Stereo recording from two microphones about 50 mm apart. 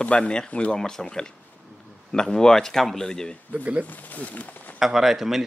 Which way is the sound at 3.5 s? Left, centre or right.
Right.